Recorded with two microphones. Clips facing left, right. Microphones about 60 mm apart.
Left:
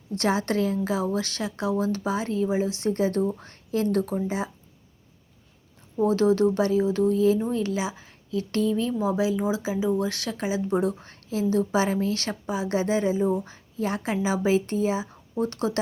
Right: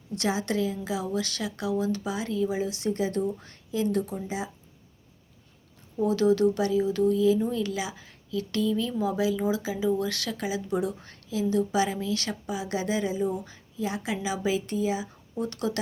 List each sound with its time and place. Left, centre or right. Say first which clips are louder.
0.2 s speech: left 3 dB; left
3.7 s speech: left 3 dB; left
6.0 s speech: left 2 dB; left
13.7 s speech: left 4 dB; left